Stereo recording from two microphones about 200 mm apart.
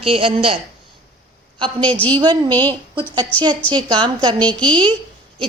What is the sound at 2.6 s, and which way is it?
Speech, 10° left (ahead or behind).